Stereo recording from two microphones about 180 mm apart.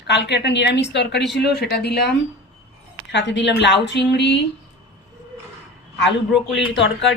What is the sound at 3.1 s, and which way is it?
A woman's voice, 80° left.